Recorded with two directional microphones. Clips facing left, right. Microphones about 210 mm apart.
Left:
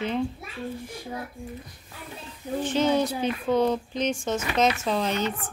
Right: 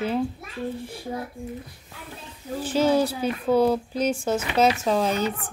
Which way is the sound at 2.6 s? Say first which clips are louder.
Right 2 dB; 5° right (ahead or behind).